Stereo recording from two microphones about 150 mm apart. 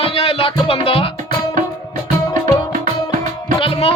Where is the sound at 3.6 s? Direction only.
40° left (ahead or behind).